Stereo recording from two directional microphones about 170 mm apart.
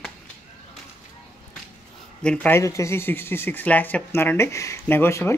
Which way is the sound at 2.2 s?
5° left (ahead or behind).